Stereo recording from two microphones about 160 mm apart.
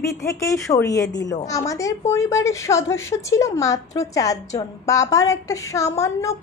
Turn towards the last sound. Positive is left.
turn(degrees=20)  # may be behind; listen again after turning